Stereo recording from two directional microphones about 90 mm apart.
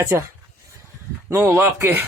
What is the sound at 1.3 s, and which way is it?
Speech, 30° right (ahead or behind).